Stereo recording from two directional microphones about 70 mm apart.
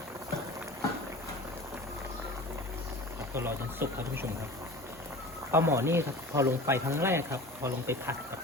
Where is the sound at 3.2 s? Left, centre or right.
Right.